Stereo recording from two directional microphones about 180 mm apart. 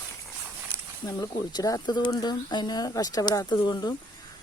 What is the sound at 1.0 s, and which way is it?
Speech, 20° left (ahead or behind).